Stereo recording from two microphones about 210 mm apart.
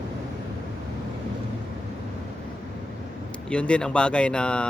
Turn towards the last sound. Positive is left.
turn(degrees=5)  # may be behind; listen again after turning